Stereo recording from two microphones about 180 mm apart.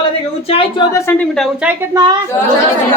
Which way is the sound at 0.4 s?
30° left (ahead or behind).